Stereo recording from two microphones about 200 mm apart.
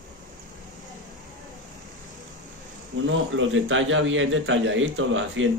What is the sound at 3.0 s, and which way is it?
A man's voice, 75° right (ahead or behind).